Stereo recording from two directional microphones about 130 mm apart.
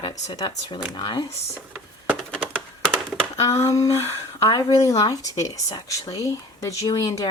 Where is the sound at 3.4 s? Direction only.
20° left (ahead or behind).